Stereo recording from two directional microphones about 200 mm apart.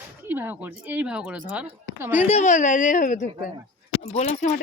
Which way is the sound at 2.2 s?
35° left (ahead or behind).